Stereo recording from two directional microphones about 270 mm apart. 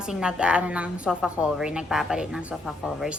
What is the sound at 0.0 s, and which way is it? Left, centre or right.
A woman's voice, centre.